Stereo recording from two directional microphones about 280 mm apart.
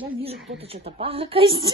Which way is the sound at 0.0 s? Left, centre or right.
Right.